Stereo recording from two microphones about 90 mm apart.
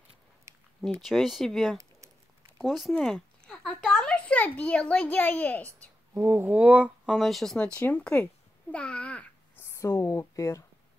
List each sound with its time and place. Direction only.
0.7 s a child's voice: centre (ahead or behind); by 5.7 s 20° left (ahead or behind)
6.1 s speech: 25° right (ahead or behind)
7.1 s speech: centre (ahead or behind)
7.5 s a child's voice: 15° left (ahead or behind)
9.6 s speech: 30° left (ahead or behind)